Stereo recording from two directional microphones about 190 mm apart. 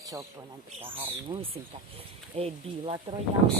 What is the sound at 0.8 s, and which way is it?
Speech, 30° right (ahead or behind).